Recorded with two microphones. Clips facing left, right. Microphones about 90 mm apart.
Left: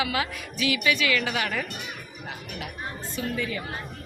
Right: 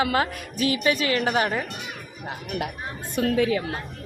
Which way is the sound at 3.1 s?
70° right (ahead or behind).